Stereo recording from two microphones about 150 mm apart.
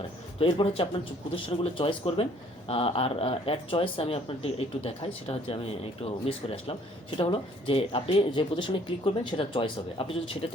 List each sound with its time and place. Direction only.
0.3 s speech: 40° left (ahead or behind)